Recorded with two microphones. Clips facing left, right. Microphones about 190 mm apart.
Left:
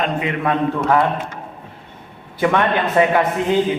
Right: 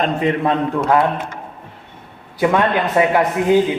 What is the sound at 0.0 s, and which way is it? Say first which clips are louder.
Speech: right 3 dB; 35° right (ahead or behind).